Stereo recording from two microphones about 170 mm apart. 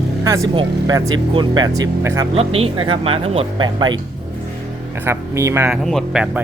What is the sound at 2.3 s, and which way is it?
Speech, 35° right (ahead or behind).